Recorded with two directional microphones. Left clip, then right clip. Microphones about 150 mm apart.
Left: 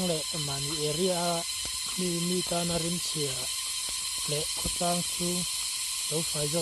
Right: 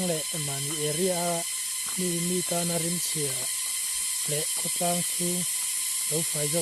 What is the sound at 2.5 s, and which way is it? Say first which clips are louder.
Speech: right 1 dB; 15° right (ahead or behind).